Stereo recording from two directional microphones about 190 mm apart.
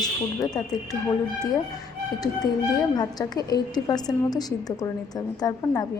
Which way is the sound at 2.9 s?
20° left (ahead or behind).